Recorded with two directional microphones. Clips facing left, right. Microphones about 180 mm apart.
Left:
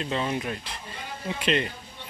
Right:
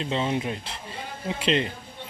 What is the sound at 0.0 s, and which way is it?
A man's voice, 25° right (ahead or behind).